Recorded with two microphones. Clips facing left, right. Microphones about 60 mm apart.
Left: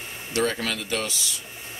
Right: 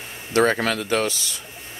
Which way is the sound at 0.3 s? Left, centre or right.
Right.